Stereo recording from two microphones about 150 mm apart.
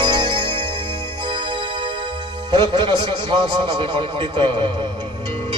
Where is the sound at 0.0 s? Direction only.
30° right (ahead or behind).